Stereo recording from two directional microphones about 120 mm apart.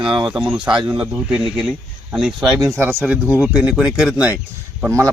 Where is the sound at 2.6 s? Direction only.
20° right (ahead or behind).